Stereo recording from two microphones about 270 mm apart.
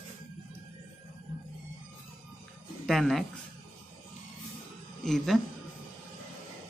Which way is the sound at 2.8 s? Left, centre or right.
Centre.